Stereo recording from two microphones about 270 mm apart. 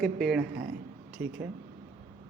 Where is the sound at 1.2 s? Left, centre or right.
Right.